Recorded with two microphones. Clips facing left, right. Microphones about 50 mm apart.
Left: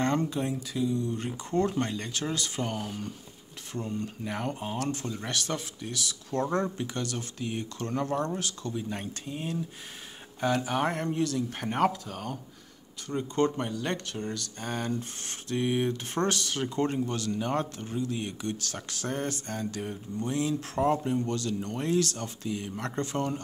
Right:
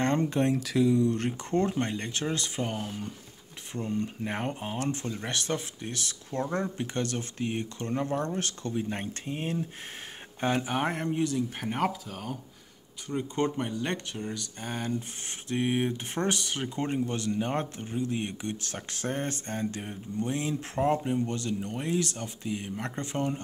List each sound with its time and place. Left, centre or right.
0.0 s a sound: right
0.3 s speech: right
0.6 s speech: right
1.2 s speech: right
1.6 s speech: right
2.6 s speech: centre
3.7 s speech: right
8.4 s speech: right
10.7 s speech: centre
11.5 s speech: centre
13.1 s speech: centre
15.4 s speech: right